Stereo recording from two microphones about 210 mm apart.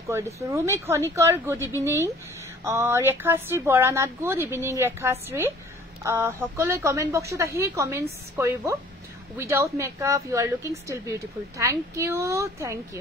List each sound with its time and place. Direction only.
0.1 s a woman's voice: 15° right (ahead or behind)
2.6 s a woman's voice: 15° right (ahead or behind)